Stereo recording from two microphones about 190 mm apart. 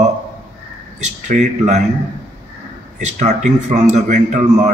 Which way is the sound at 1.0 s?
40° right (ahead or behind).